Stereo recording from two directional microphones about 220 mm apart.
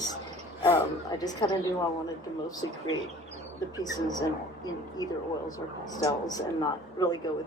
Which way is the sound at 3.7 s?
15° left (ahead or behind).